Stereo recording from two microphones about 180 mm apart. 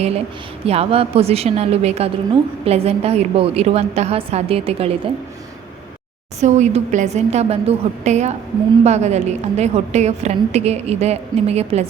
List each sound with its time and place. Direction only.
0.6 s a woman's voice: 35° right (ahead or behind)
6.4 s a woman's voice: 40° right (ahead or behind)